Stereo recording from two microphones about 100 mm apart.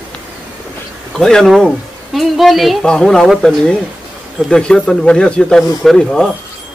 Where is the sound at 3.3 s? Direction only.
5° right (ahead or behind).